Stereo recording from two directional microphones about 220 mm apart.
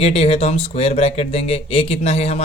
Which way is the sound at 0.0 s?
25° left (ahead or behind).